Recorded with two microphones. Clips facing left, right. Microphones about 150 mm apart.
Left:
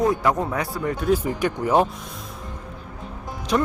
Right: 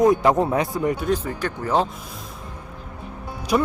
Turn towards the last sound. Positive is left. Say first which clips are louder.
# right 1 dB
turn(degrees=-5)  # may be behind; listen again after turning